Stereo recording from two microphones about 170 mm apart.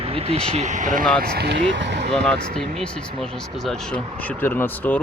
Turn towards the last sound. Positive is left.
turn(degrees=10)  # may be behind; listen again after turning